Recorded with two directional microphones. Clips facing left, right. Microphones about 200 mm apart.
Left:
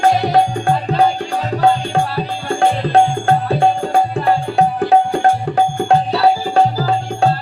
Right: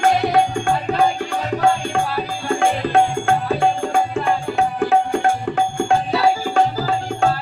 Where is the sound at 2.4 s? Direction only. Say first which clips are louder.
Left 2 dB; 35° left (ahead or behind).